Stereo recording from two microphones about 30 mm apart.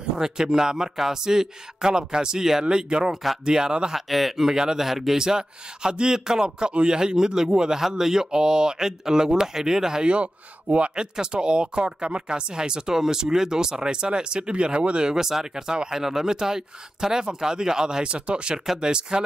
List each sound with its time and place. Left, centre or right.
0.2 s speech: right
3.9 s speech: centre
5.2 s speech: right
8.3 s speech: right
10.0 s a man's voice: right
11.0 s speech: right
15.1 s speech: centre
18.0 s a man's voice: right